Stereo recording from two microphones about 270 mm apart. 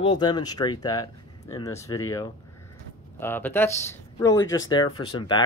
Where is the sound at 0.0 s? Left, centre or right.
Centre.